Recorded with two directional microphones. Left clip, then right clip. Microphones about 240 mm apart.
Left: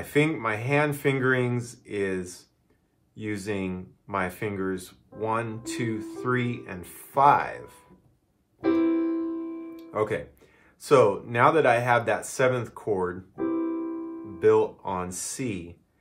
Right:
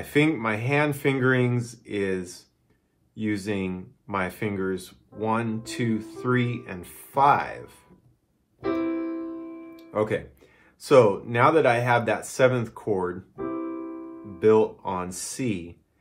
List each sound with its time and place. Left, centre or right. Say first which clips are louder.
0.0 s speech: right 2 dB; centre
9.8 s speech: right 2 dB; centre
13.4 s keyboard: left 4 dB; left
14.4 s speech: right 1 dB; centre